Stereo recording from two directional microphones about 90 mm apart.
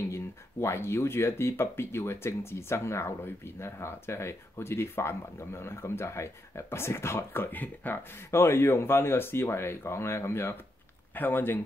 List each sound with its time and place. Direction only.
0.1 s speech: 30° left (ahead or behind)